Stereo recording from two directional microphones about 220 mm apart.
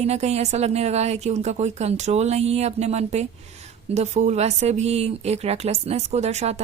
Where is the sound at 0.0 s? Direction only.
30° right (ahead or behind).